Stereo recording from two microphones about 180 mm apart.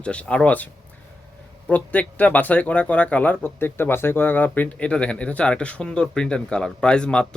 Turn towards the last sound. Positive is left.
turn(degrees=5)  # may be behind; listen again after turning